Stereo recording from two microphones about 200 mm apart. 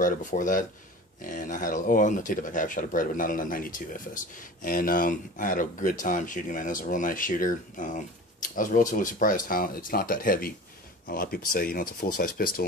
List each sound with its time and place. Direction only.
0.0 s speech: 40° left (ahead or behind)